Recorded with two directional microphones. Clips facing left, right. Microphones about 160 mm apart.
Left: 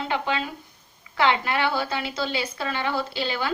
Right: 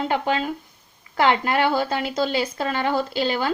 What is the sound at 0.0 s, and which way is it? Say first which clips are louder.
A woman's voice: right 4 dB; 40° right (ahead or behind).